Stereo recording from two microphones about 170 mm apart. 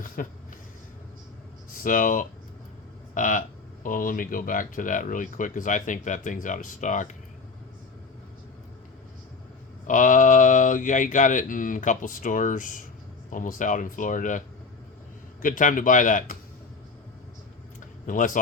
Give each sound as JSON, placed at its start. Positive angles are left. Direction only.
{"t": 0.2, "sound": "speech", "side_deg": 55}
{"t": 1.7, "sound": "speech", "side_deg": 55}
{"t": 9.8, "sound": "speech", "side_deg": 50}
{"t": 18.0, "sound": "speech", "side_deg": 50}